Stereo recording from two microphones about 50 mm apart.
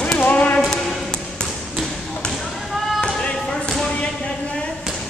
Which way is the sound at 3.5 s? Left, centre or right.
Centre.